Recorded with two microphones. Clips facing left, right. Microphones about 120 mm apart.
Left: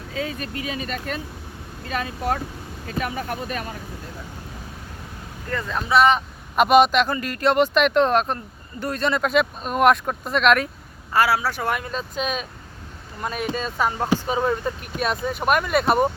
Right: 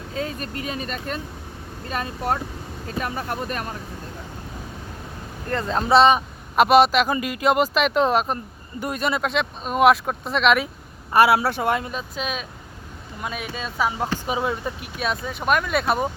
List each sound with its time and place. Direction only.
0.1 s speech: 35° right (ahead or behind)
3.0 s speech: 40° right (ahead or behind)
5.5 s speech: 30° right (ahead or behind)
6.6 s speech: centre (ahead or behind)
9.2 s speech: centre (ahead or behind)
11.1 s speech: 25° right (ahead or behind)
11.9 s speech: 5° right (ahead or behind)